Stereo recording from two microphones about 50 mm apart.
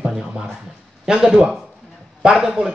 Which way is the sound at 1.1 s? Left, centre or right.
Centre.